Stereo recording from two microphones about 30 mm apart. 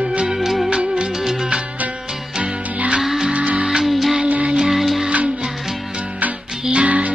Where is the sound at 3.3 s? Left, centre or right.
Right.